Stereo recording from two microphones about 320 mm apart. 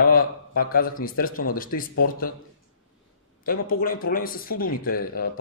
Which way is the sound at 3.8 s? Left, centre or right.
Left.